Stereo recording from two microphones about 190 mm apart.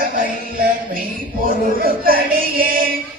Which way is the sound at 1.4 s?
50° right (ahead or behind).